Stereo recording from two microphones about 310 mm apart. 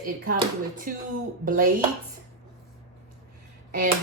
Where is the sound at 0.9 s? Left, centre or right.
Right.